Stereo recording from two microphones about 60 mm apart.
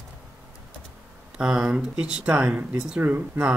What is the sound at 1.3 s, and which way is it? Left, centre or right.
Speech, centre.